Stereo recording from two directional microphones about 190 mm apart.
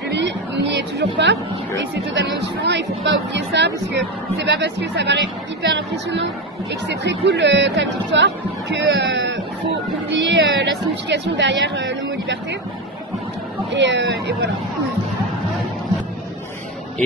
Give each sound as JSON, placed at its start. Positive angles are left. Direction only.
{"t": 0.1, "sound": "a woman's voice", "side_deg": -70}
{"t": 13.7, "sound": "speech", "side_deg": -70}